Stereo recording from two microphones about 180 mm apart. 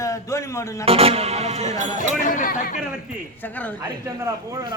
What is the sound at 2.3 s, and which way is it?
Speech, 45° left (ahead or behind).